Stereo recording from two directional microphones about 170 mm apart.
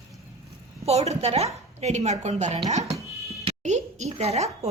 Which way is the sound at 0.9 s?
40° right (ahead or behind).